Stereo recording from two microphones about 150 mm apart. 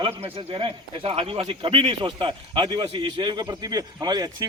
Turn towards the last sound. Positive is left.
turn(degrees=-25)  # may be behind; listen again after turning